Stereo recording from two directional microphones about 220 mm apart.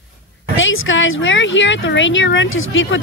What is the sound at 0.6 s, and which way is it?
Speech, 60° left (ahead or behind).